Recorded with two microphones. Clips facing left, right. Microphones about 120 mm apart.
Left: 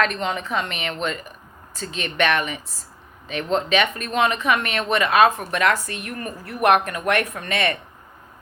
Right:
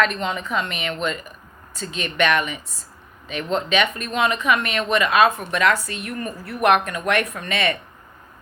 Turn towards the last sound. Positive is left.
turn(degrees=30)  # may be behind; listen again after turning